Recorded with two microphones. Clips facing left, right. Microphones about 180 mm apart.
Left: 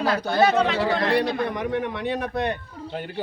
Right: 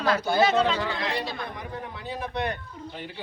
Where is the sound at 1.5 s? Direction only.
80° left.